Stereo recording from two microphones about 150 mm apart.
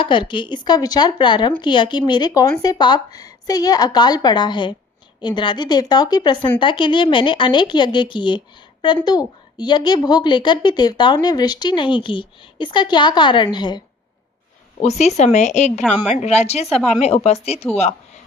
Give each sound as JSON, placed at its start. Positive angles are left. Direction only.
{"t": 0.0, "sound": "a woman's voice", "side_deg": 30}
{"t": 14.8, "sound": "speech", "side_deg": 50}
{"t": 16.6, "sound": "speech", "side_deg": 0}
{"t": 17.0, "sound": "speech", "side_deg": 45}